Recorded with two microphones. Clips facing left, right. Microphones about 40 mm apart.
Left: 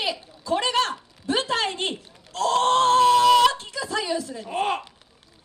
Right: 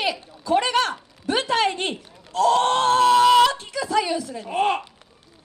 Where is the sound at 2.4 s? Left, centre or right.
Right.